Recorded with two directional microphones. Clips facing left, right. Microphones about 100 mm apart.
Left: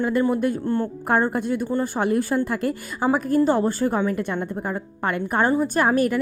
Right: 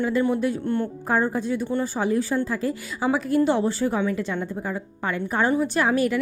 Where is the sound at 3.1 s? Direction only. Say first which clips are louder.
Left 1 dB; 45° left (ahead or behind).